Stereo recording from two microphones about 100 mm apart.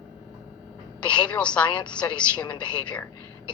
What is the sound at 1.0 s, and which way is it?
A woman's voice, 10° left (ahead or behind).